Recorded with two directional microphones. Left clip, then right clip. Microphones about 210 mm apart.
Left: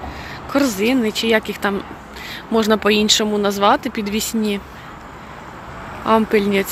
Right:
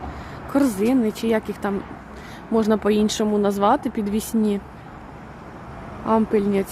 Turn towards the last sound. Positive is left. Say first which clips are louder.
# left 4 dB
turn(degrees=-5)  # may be behind; listen again after turning